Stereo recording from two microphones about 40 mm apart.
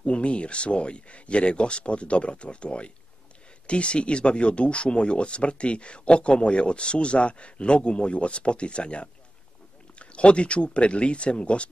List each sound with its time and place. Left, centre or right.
0.0 s speech: left